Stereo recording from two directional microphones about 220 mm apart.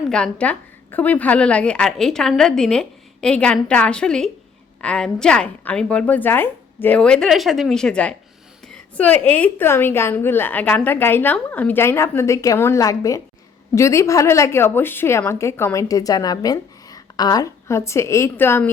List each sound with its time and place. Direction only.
0.1 s a woman's voice: 5° left (ahead or behind)